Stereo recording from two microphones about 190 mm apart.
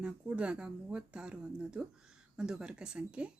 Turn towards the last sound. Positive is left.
turn(degrees=-5)  # may be behind; listen again after turning